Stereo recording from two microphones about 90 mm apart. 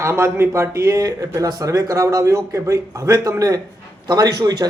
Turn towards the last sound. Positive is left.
turn(degrees=-45)  # may be behind; listen again after turning